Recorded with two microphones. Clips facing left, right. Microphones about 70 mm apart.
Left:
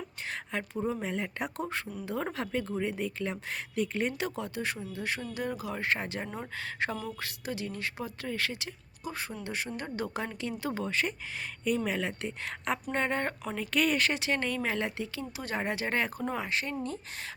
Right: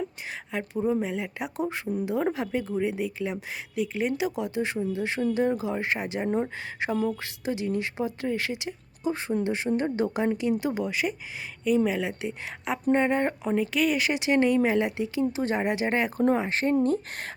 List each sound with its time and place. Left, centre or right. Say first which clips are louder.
0.3 s speech: right 3 dB; centre
16.1 s speech: right 9 dB; right